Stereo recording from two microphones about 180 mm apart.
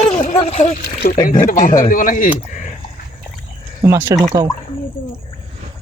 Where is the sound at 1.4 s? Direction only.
50° left (ahead or behind).